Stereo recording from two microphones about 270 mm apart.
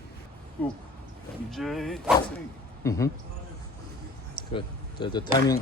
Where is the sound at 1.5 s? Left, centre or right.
Centre.